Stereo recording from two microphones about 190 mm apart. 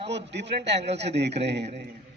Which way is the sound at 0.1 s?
65° right (ahead or behind).